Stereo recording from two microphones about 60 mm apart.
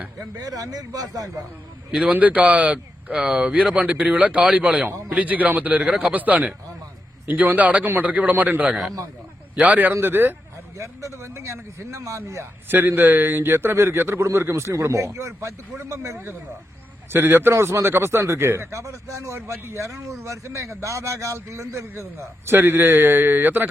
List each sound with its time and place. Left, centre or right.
0.2 s a man's voice: right
1.9 s speech: centre
2.1 s speech: right
2.7 s speech: centre; by 9.9 s right
9.9 s a man's voice: right
10.8 s speech: right
12.6 s a man's voice: right
17.1 s a man's voice: right